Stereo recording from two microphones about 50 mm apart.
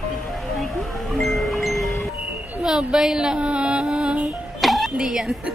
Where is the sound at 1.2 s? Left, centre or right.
Centre.